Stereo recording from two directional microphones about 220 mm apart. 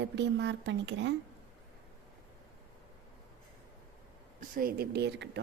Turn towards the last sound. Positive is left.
turn(degrees=-50)  # may be behind; listen again after turning